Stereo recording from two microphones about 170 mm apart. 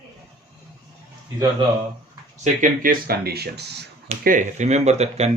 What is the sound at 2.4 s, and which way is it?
Speech, 50° right (ahead or behind).